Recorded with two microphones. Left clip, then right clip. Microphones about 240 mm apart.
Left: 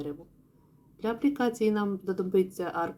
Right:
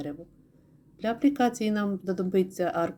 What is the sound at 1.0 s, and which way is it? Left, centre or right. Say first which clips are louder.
A woman's voice: right 3 dB; right.